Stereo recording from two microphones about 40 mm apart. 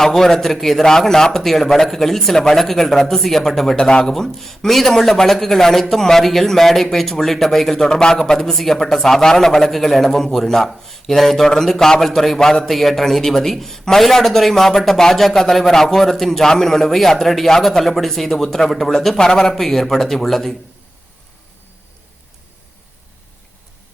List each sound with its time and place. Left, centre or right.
0.0 s a man's voice: centre
1.4 s a man's voice: centre
3.8 s speech: centre
4.1 s a man's voice: centre
7.9 s a man's voice: centre
12.4 s a man's voice: centre
12.6 s a man's voice: centre